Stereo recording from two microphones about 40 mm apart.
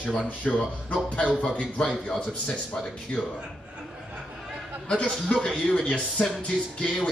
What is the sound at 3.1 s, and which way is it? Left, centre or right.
Speech, left.